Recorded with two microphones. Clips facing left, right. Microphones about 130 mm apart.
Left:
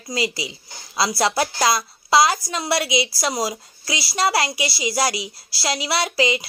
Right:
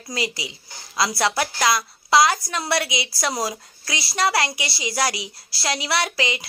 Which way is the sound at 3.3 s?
15° left (ahead or behind).